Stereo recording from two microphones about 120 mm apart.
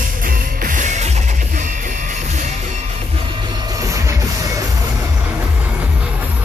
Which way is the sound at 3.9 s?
25° right (ahead or behind).